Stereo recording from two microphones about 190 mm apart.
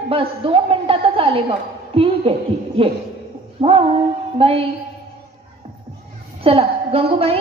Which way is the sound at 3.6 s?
30° right (ahead or behind).